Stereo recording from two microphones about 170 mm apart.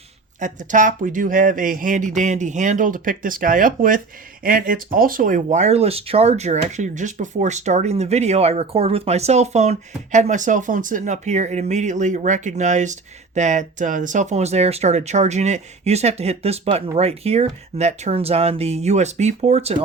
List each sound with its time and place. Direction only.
0.3 s speech: 45° right (ahead or behind)